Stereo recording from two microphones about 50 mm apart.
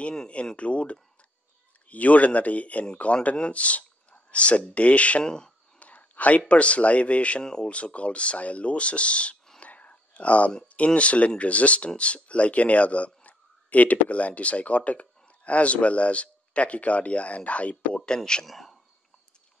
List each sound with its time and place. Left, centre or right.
0.6 s speech: left
5.2 s speech: centre
5.8 s whispering: left
6.5 s speech: left
9.6 s whispering: left
11.0 s speech: left
18.5 s speech: centre